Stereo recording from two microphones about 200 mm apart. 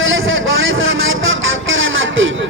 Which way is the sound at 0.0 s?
70° right (ahead or behind).